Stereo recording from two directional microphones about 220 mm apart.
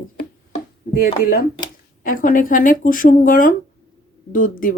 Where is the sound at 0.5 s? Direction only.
35° left (ahead or behind).